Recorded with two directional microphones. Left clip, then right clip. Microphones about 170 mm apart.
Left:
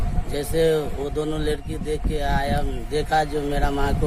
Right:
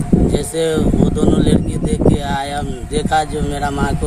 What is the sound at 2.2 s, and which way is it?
Speech, 5° right (ahead or behind).